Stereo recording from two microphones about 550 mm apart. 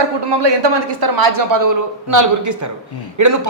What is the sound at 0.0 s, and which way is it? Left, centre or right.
A man's voice, right.